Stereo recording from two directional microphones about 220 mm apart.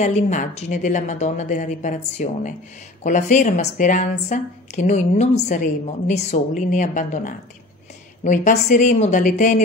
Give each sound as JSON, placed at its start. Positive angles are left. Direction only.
{"t": 0.0, "sound": "a woman's voice", "side_deg": 35}